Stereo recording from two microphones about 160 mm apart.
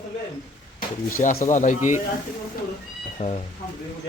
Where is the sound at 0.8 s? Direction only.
60° left (ahead or behind).